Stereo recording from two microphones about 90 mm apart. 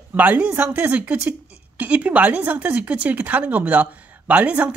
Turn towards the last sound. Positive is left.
turn(degrees=-15)  # may be behind; listen again after turning